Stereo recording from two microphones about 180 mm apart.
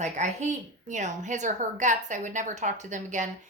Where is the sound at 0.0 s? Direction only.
40° right (ahead or behind).